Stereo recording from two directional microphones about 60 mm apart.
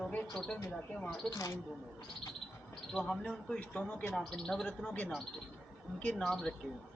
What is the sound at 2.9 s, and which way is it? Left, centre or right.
A man's voice, centre.